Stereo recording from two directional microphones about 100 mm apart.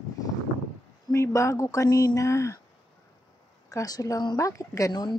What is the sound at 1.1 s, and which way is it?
Speech, 30° left (ahead or behind).